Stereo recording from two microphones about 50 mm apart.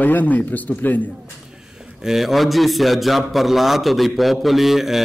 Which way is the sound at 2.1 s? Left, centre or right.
Centre.